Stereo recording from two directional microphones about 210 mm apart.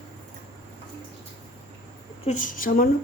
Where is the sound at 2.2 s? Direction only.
40° left (ahead or behind).